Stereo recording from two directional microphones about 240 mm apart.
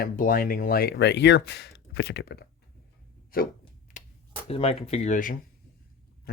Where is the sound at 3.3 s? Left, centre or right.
Left.